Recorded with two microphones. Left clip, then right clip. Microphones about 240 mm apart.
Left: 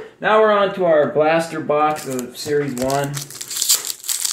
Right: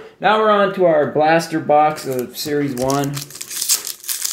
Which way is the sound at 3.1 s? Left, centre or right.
Centre.